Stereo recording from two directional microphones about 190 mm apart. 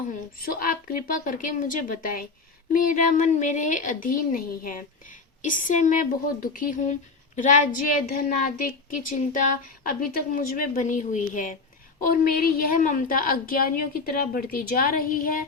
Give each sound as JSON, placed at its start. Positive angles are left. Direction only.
{"t": 0.1, "sound": "a woman's voice", "side_deg": 45}